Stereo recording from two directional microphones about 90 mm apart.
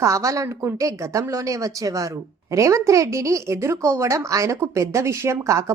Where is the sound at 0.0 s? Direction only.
35° right (ahead or behind).